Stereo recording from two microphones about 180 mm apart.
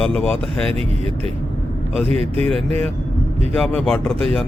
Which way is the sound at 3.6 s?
5° left (ahead or behind).